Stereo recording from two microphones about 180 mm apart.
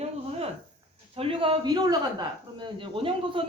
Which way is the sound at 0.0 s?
35° right (ahead or behind).